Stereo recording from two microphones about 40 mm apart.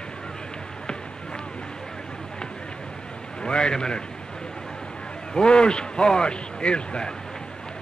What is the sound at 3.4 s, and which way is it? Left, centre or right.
Speech, left.